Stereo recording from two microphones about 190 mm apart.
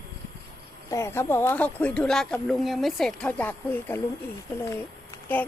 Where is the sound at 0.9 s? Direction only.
15° left (ahead or behind).